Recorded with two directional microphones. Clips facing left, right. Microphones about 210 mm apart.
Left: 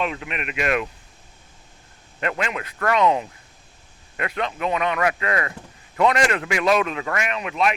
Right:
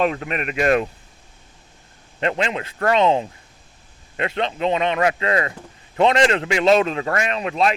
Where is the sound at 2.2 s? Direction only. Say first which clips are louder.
Right 4 dB; 25° right (ahead or behind).